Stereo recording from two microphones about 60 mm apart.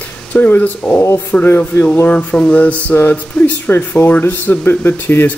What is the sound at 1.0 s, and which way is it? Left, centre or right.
Speech, left.